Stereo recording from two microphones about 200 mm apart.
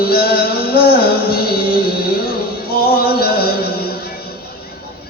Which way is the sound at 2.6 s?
50° left (ahead or behind).